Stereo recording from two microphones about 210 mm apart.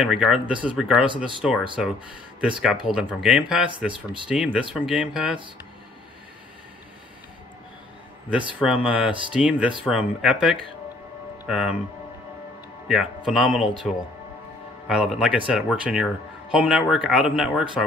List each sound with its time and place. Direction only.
0.0 s speech: centre (ahead or behind)
2.6 s speech: 5° right (ahead or behind)
8.5 s speech: 5° right (ahead or behind)
12.8 s speech: centre (ahead or behind)
14.9 s speech: 5° right (ahead or behind)